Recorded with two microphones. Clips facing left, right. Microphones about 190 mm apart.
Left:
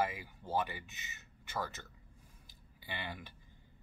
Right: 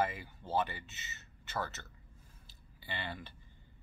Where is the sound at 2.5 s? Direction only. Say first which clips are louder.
Right 1 dB; 10° left (ahead or behind).